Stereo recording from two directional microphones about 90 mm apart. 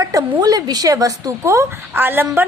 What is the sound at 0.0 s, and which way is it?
A woman's voice, 40° right (ahead or behind).